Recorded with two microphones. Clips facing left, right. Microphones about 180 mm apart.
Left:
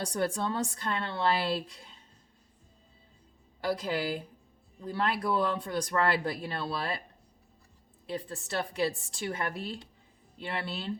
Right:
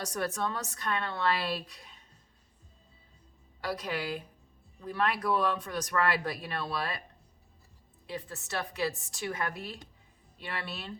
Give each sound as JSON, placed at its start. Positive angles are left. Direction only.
{"t": 0.0, "sound": "speech", "side_deg": 30}
{"t": 3.6, "sound": "speech", "side_deg": 30}
{"t": 8.0, "sound": "speech", "side_deg": 30}